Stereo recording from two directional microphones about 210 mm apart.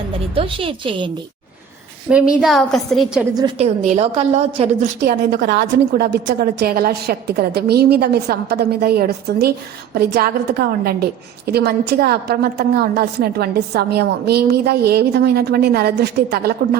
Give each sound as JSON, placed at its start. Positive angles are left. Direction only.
{"t": 0.3, "sound": "a woman's voice", "side_deg": -25}
{"t": 2.0, "sound": "a woman's voice", "side_deg": -5}
{"t": 3.3, "sound": "a woman's voice", "side_deg": -20}
{"t": 5.0, "sound": "a woman's voice", "side_deg": -50}